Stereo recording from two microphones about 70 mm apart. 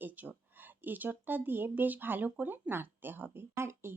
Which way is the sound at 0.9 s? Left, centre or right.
Right.